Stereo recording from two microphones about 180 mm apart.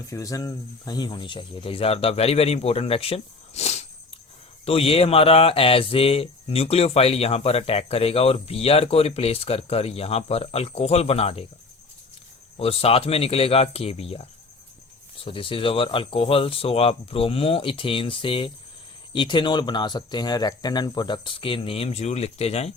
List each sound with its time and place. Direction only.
0.1 s speech: 20° left (ahead or behind); by 11.4 s 35° left (ahead or behind)
12.5 s speech: 35° left (ahead or behind)